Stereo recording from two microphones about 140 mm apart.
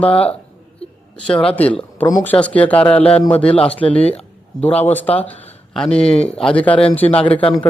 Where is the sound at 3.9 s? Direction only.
45° left (ahead or behind).